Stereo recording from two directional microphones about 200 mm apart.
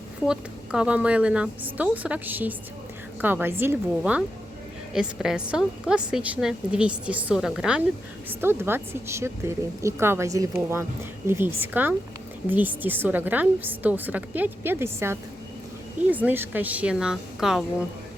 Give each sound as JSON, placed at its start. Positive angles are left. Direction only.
{"t": 0.3, "sound": "a woman's voice", "side_deg": -5}